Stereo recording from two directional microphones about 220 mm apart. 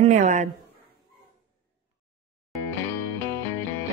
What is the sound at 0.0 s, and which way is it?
Speech, 35° right (ahead or behind).